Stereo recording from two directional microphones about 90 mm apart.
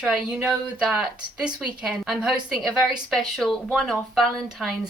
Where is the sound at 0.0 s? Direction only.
10° right (ahead or behind).